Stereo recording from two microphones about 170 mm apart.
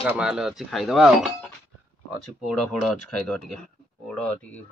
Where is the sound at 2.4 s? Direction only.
Centre (ahead or behind).